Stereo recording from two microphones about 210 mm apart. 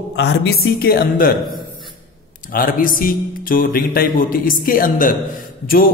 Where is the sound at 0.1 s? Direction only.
55° left (ahead or behind).